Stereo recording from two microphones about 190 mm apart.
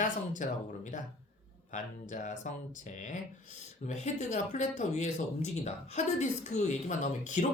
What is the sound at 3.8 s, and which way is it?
Speech, 40° left (ahead or behind).